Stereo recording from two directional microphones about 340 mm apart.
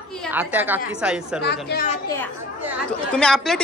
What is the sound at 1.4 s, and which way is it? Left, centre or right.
Speech, left.